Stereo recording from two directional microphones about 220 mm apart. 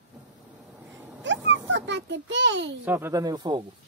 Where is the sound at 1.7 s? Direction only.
55° right (ahead or behind).